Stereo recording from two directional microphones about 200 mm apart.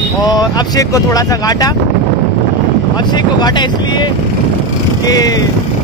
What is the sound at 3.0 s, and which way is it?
Speech, 20° left (ahead or behind).